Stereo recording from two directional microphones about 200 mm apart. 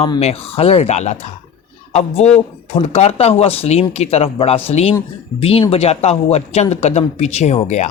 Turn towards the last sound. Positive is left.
turn(degrees=35)  # may be behind; listen again after turning